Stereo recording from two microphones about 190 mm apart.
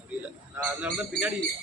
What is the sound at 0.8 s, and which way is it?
Speech, 10° right (ahead or behind).